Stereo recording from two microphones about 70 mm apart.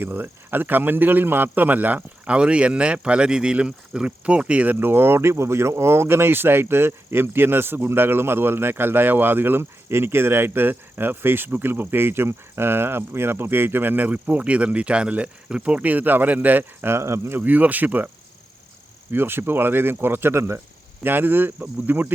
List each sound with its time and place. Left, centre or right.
0.0 s a man's voice: right
17.4 s speech: right
19.1 s a man's voice: right
21.0 s speech: right